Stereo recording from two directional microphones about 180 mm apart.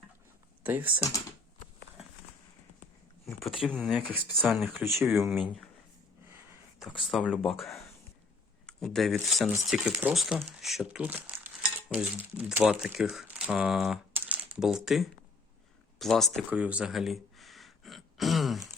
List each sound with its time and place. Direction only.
0.6 s speech: 10° right (ahead or behind)
3.6 s speech: centre (ahead or behind)
6.7 s speech: centre (ahead or behind)
8.6 s speech: centre (ahead or behind)
16.5 s a sound: 5° right (ahead or behind)